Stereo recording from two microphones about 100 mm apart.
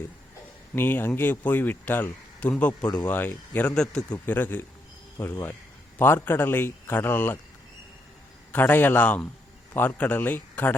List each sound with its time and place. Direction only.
0.8 s a man's voice: 20° left (ahead or behind)
3.8 s a man's voice: 10° left (ahead or behind)
4.3 s speech: 20° left (ahead or behind)
8.5 s a man's voice: 20° left (ahead or behind)